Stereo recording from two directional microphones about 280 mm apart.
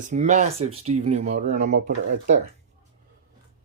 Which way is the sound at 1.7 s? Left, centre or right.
Right.